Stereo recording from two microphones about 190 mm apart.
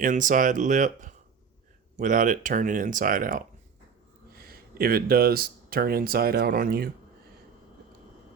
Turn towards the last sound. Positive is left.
turn(degrees=-50)  # may be behind; listen again after turning